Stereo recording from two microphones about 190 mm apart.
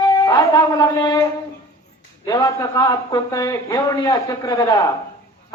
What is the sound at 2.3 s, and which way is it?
Speech, 20° left (ahead or behind).